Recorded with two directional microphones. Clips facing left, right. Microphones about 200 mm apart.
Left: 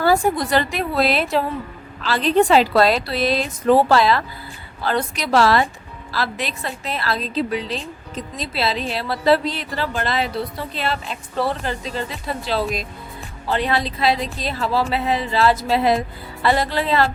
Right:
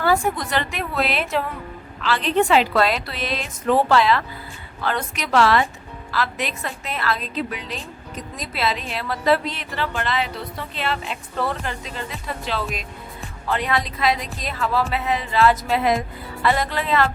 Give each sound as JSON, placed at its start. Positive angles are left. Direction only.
{"t": 0.0, "sound": "a woman's voice", "side_deg": 35}